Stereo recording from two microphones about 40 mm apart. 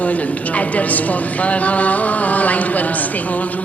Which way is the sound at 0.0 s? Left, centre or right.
Left.